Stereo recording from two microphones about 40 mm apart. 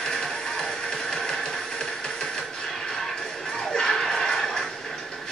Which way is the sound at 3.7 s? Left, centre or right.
Centre.